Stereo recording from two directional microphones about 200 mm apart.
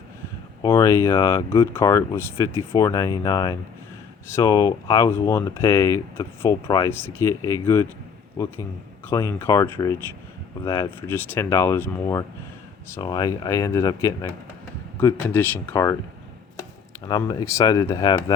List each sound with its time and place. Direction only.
0.6 s speech: 15° left (ahead or behind)
17.1 s speech: 20° left (ahead or behind)